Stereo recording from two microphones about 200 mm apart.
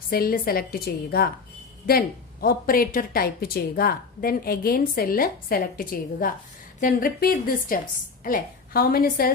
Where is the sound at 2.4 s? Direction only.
45° left (ahead or behind).